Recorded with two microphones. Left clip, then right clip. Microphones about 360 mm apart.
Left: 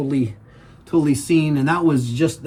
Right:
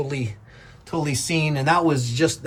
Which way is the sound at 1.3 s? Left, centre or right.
Centre.